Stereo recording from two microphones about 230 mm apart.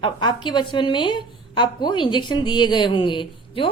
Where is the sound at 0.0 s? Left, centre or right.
Centre.